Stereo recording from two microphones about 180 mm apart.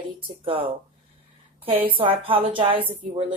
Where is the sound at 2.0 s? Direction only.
30° right (ahead or behind).